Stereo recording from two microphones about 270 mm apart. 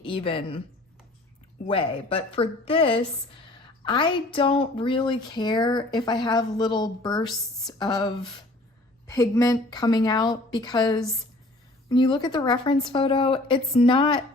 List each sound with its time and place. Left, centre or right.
0.0 s a woman's voice: centre
1.7 s a woman's voice: centre